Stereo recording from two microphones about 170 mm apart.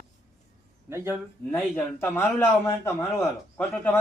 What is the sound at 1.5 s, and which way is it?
Speech, 15° left (ahead or behind).